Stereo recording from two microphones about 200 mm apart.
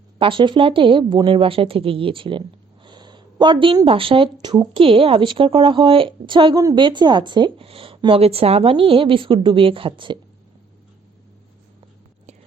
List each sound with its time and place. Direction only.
0.2 s speech: 25° right (ahead or behind)